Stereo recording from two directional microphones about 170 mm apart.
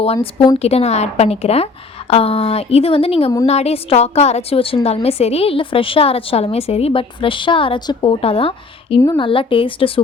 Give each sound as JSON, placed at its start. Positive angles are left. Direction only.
{"t": 0.6, "sound": "a woman's voice", "side_deg": 40}